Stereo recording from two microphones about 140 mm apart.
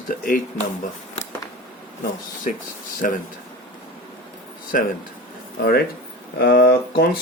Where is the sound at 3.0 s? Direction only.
85° left.